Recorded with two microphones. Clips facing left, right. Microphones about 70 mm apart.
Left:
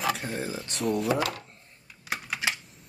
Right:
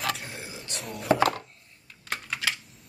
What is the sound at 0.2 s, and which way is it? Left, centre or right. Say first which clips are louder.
Speech: left 8 dB; left.